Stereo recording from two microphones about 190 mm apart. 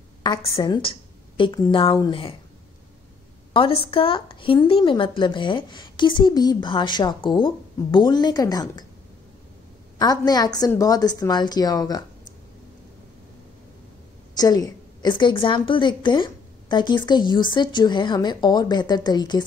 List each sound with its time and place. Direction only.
0.2 s a woman's voice: 20° left (ahead or behind)
3.5 s a woman's voice: 30° left (ahead or behind)
9.9 s a woman's voice: 20° left (ahead or behind)
14.3 s a woman's voice: 20° left (ahead or behind)